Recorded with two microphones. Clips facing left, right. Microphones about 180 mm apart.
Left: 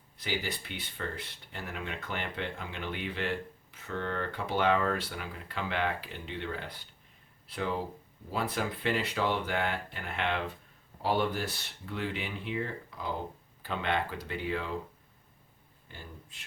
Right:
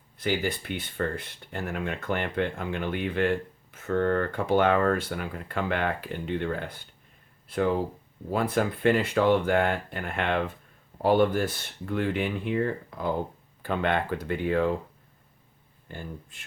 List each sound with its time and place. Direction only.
0.2 s speech: 50° right (ahead or behind)
15.9 s speech: 50° right (ahead or behind)